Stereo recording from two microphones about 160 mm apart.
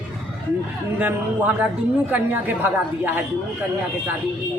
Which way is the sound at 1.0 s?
10° right (ahead or behind).